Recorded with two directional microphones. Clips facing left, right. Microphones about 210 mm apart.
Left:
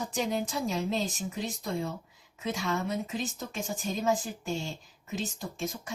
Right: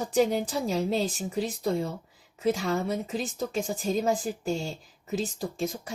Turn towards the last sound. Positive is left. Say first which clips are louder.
# right 5 dB
turn(degrees=-35)  # may be behind; listen again after turning